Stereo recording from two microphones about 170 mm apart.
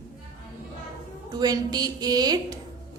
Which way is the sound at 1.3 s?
25° right (ahead or behind).